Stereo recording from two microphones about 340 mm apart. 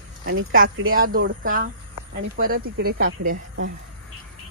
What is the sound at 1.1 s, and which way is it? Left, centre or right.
Speech, right.